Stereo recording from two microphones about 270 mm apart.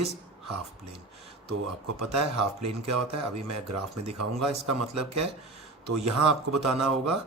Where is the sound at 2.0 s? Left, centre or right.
Right.